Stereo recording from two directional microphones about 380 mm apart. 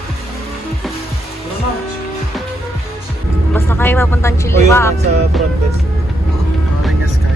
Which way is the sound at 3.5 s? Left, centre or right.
Centre.